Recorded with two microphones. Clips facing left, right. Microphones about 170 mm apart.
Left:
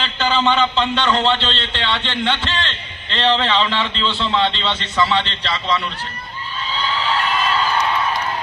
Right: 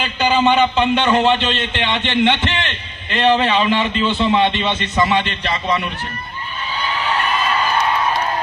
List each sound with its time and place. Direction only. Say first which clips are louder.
0.0 s a man's voice: right 3 dB; 15° right (ahead or behind)